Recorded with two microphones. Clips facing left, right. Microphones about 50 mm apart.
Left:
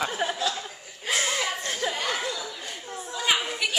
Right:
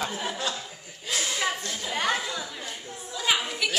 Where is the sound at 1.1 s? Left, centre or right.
Left.